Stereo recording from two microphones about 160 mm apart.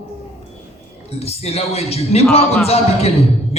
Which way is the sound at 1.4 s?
40° left (ahead or behind).